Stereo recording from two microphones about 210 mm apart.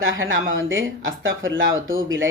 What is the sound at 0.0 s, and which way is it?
Speech, 70° right (ahead or behind).